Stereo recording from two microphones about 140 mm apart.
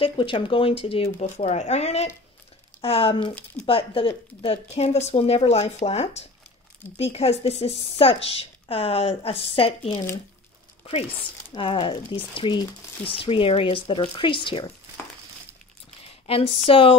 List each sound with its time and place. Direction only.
0.0 s speech: 40° left (ahead or behind)
1.2 s a woman's voice: 50° left (ahead or behind)
11.5 s speech: 35° left (ahead or behind)
16.1 s speech: 40° left (ahead or behind)